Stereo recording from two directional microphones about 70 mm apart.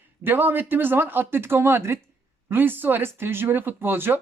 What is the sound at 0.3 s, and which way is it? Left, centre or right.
Speech, right.